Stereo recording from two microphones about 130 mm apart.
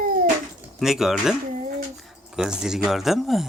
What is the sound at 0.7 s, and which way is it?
Speech, 5° right (ahead or behind).